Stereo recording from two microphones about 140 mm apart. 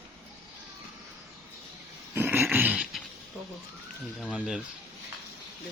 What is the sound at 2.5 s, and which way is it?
Dog, 10° right (ahead or behind).